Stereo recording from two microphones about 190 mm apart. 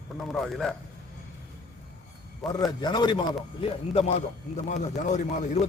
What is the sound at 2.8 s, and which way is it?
A man's voice, 20° left (ahead or behind).